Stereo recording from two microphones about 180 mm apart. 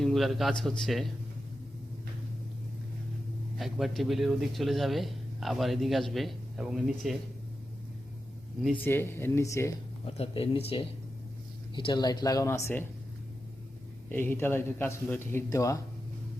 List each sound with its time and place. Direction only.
0.0 s a man's voice: centre (ahead or behind)
3.6 s a man's voice: centre (ahead or behind)
8.6 s speech: 10° left (ahead or behind)
10.2 s speech: 30° left (ahead or behind)
11.7 s speech: 25° left (ahead or behind)
14.1 s speech: 10° left (ahead or behind)